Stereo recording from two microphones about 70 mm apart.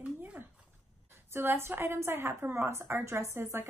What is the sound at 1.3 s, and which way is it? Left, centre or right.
A woman's voice, right.